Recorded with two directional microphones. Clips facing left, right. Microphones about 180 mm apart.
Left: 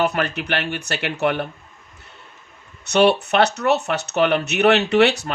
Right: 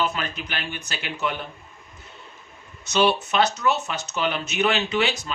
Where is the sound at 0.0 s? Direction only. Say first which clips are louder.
Left 6 dB; 65° left (ahead or behind).